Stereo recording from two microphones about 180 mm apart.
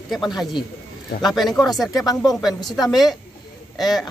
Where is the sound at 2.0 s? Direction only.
20° left (ahead or behind).